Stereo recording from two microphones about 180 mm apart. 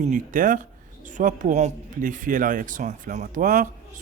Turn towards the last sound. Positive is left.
turn(degrees=-50)  # may be behind; listen again after turning